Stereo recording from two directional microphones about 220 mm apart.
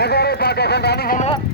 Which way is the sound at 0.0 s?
45° left (ahead or behind).